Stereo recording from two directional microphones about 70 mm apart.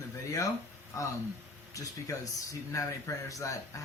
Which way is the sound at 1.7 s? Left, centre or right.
Left.